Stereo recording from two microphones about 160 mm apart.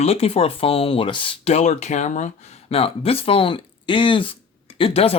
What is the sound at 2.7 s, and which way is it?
Speech, 35° left (ahead or behind).